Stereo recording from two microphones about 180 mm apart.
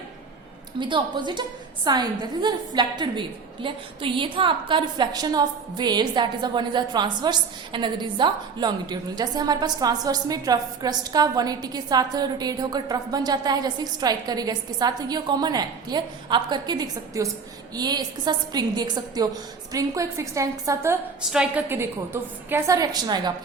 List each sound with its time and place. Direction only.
0.8 s a woman's voice: 25° right (ahead or behind)
21.2 s a woman's voice: 5° right (ahead or behind); by 23.3 s 25° right (ahead or behind)